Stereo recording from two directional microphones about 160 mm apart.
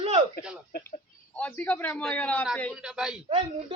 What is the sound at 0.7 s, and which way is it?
Speech, 65° left (ahead or behind).